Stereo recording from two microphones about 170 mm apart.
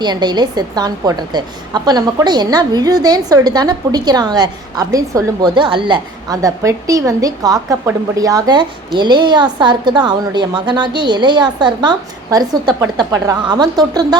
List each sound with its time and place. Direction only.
0.0 s a woman's voice: 25° right (ahead or behind)